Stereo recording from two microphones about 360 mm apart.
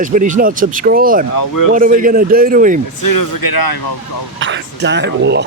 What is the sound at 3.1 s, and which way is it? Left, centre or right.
Speech, left.